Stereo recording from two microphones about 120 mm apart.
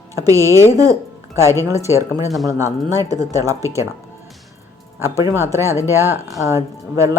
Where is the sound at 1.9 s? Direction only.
25° right (ahead or behind).